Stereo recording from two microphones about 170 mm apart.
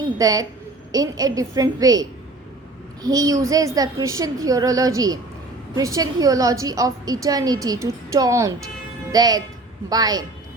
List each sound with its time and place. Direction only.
0.2 s a woman's voice: 20° right (ahead or behind)